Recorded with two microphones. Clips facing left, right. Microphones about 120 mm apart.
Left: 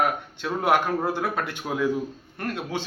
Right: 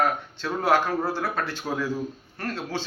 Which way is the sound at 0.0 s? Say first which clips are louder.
Even; 15° left (ahead or behind).